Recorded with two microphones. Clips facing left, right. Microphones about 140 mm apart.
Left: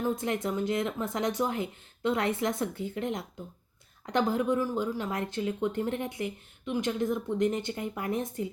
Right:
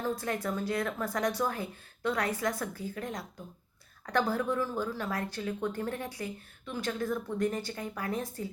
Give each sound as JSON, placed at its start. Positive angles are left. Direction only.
{"t": 0.0, "sound": "speech", "side_deg": 20}